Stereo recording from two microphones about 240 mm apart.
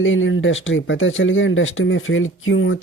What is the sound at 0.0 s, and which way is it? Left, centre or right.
Speech, left.